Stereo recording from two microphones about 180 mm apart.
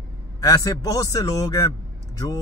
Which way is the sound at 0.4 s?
20° left (ahead or behind).